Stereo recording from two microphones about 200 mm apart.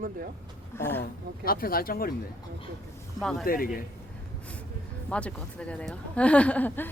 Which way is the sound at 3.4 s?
45° left (ahead or behind).